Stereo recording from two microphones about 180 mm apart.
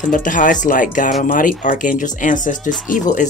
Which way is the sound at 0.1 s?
45° left (ahead or behind).